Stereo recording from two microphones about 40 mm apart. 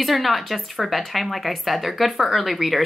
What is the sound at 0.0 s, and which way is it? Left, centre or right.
Speech, centre.